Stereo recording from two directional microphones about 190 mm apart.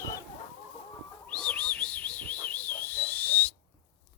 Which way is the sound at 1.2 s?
5° left (ahead or behind).